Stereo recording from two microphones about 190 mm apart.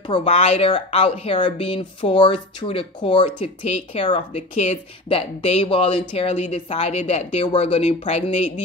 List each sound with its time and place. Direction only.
0.1 s speech: 30° left (ahead or behind)